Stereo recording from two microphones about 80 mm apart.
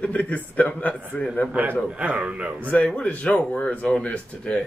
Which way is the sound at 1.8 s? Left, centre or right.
Centre.